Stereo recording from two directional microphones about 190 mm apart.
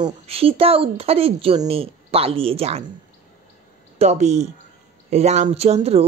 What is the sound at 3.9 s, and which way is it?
A woman's voice, 35° right (ahead or behind).